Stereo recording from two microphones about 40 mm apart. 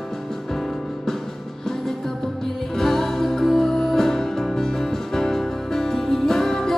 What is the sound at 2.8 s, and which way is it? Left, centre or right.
Music, centre.